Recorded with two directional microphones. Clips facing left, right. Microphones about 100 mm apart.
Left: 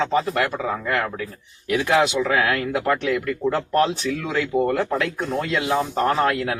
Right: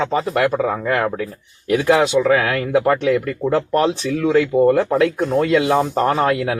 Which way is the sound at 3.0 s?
25° right (ahead or behind).